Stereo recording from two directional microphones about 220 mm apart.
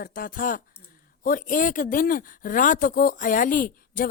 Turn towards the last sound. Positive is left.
turn(degrees=40)  # may be behind; listen again after turning